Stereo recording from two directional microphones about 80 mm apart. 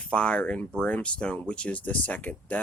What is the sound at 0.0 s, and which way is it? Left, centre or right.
Speech, centre.